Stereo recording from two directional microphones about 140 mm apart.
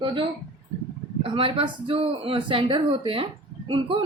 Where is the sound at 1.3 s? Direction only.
40° right (ahead or behind).